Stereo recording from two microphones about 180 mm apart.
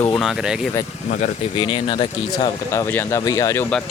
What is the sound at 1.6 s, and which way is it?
Speech, 30° left (ahead or behind).